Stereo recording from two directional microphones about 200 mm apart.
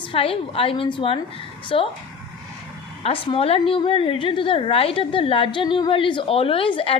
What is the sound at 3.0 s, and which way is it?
A woman's voice, 30° left (ahead or behind).